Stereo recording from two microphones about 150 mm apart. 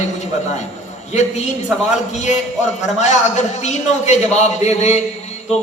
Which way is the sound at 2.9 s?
50° left (ahead or behind).